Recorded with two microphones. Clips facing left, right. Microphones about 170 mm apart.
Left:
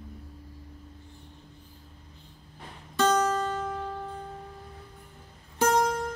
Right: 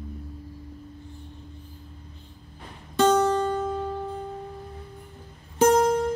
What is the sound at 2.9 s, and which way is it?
Music, 20° right (ahead or behind).